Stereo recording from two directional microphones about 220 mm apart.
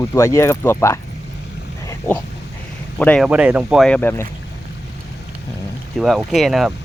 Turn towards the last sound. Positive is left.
turn(degrees=0)  # may be behind; listen again after turning